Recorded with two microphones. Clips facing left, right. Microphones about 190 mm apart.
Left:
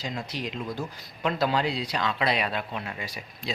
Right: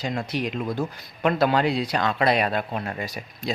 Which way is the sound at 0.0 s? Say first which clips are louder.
Right 6 dB; 55° right (ahead or behind).